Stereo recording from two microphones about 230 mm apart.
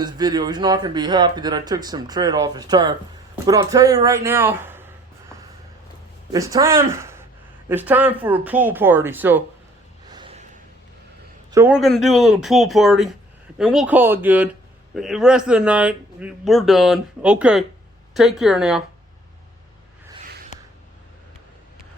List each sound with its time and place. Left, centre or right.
0.0 s speech: centre
6.3 s speech: centre
10.1 s a sound: right
11.5 s speech: centre